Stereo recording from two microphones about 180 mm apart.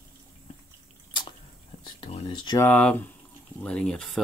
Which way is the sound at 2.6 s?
10° left (ahead or behind).